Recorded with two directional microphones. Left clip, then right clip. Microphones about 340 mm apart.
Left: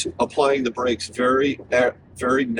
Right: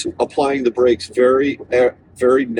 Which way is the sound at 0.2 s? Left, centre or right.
Centre.